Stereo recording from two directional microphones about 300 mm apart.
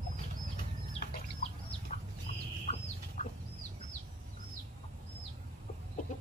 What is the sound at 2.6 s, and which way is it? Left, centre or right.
Chicken, left.